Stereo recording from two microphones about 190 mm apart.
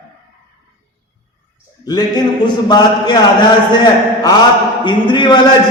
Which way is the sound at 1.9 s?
20° left (ahead or behind).